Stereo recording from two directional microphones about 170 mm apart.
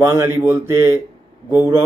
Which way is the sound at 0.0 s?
15° right (ahead or behind).